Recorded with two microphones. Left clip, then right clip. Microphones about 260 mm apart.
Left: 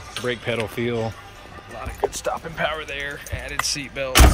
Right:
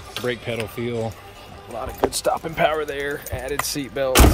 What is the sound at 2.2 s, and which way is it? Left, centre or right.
Speech, right.